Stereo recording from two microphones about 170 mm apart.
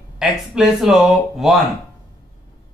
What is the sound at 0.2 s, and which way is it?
A man's voice, centre (ahead or behind).